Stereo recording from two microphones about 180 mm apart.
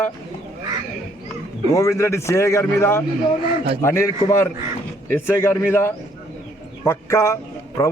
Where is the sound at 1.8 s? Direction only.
15° left (ahead or behind).